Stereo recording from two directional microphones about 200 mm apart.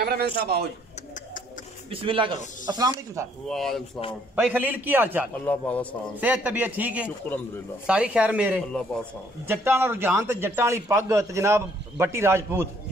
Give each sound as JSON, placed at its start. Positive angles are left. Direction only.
{"t": 0.0, "sound": "a man's voice", "side_deg": -50}
{"t": 1.9, "sound": "speech", "side_deg": -25}
{"t": 3.4, "sound": "speech", "side_deg": 0}
{"t": 4.4, "sound": "a man's voice", "side_deg": -10}
{"t": 5.4, "sound": "a man's voice", "side_deg": 5}
{"t": 6.2, "sound": "a man's voice", "side_deg": -10}